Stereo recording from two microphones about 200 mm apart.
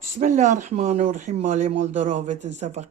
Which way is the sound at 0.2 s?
35° right (ahead or behind).